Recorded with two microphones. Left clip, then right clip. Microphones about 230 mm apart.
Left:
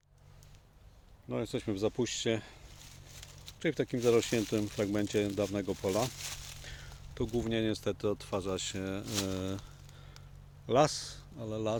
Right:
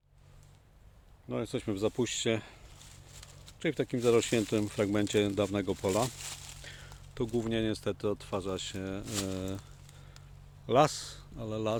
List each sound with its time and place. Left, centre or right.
1.3 s speech: centre; by 6.1 s right
6.7 s a sound: centre
7.3 s speech: centre
10.7 s speech: centre